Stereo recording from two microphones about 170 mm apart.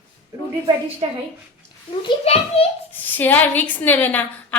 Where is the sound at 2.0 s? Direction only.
35° left (ahead or behind).